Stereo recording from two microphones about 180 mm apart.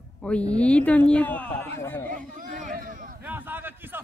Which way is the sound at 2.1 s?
45° right (ahead or behind).